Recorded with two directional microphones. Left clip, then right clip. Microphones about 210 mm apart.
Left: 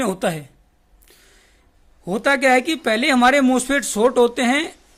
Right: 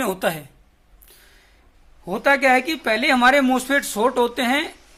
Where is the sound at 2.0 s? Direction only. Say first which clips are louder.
Even; 55° left (ahead or behind).